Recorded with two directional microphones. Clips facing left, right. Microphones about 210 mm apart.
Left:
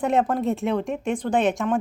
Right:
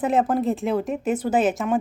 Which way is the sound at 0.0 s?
5° right (ahead or behind).